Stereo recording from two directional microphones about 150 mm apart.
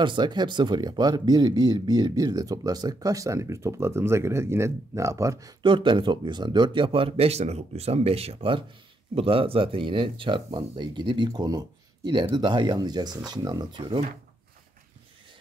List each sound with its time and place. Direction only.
0.0 s speech: 30° right (ahead or behind)